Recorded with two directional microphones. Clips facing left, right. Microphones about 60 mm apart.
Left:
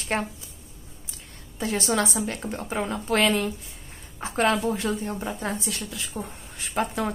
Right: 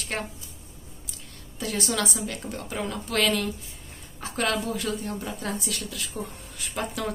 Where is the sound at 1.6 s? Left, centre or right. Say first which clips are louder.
Left 3 dB; left.